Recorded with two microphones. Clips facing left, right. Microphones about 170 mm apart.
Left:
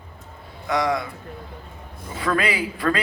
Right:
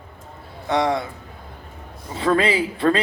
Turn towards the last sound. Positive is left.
turn(degrees=-25)  # may be behind; listen again after turning